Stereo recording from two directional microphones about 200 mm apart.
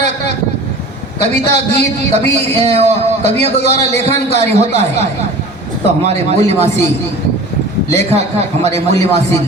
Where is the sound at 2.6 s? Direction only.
35° right (ahead or behind).